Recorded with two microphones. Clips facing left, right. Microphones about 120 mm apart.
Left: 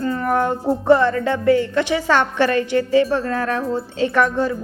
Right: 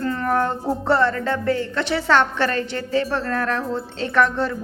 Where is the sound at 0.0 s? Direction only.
15° left (ahead or behind).